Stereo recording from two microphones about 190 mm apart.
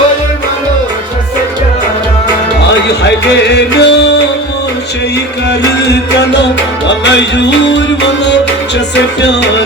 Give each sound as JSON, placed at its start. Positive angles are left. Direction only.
{"t": 3.5, "sound": "music", "side_deg": 60}
{"t": 6.8, "sound": "music", "side_deg": 65}